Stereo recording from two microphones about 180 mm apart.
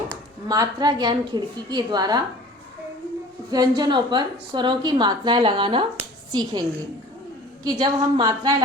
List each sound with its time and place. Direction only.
0.4 s a woman's voice: 20° right (ahead or behind)
3.5 s a woman's voice: 25° right (ahead or behind)